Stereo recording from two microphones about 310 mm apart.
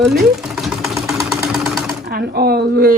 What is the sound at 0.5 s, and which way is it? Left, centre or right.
Sewing machine, centre.